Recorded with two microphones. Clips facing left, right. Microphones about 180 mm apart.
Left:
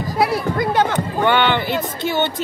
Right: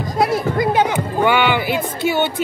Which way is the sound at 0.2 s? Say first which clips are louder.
Right 2 dB; centre (ahead or behind).